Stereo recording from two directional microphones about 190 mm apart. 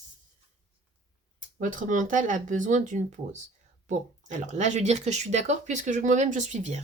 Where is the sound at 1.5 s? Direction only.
45° right (ahead or behind).